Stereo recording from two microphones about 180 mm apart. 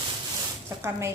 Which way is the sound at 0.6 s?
15° right (ahead or behind).